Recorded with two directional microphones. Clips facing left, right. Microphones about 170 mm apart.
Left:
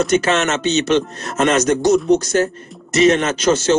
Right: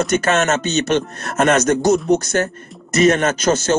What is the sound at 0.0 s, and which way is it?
Speech, 50° right (ahead or behind).